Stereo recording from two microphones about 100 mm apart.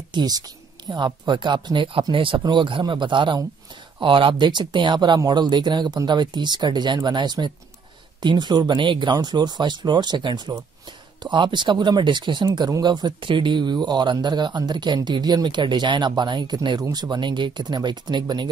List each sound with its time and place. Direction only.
0.1 s a woman's voice: 45° right (ahead or behind)